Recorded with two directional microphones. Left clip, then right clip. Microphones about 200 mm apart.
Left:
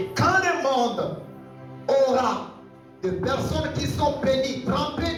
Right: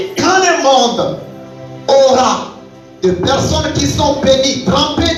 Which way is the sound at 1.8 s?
50° right (ahead or behind).